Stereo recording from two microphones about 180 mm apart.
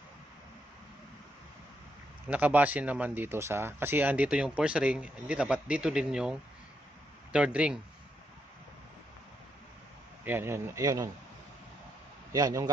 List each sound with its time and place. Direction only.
2.2 s speech: 10° right (ahead or behind)
7.3 s speech: 5° right (ahead or behind)
10.2 s speech: 10° right (ahead or behind)
12.3 s a man's voice: 20° right (ahead or behind)